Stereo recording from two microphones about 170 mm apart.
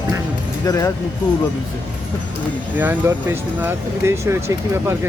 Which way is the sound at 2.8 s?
10° right (ahead or behind).